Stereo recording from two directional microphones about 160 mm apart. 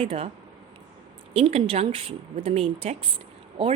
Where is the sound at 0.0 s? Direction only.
35° right (ahead or behind).